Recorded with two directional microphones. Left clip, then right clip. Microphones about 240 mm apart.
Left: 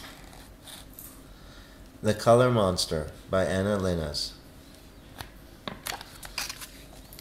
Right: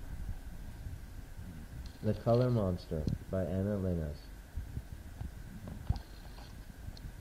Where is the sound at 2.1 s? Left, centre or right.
Centre.